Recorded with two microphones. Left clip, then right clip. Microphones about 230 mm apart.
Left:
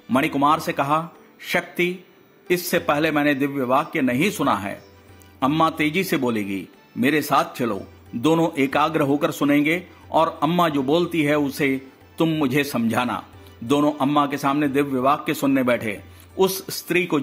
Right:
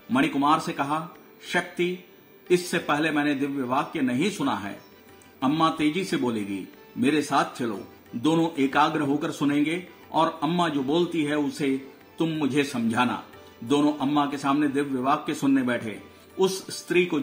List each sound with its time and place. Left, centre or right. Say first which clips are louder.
0.1 s speech: left 3 dB; left